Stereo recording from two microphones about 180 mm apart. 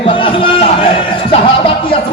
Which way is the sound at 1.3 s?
30° left (ahead or behind).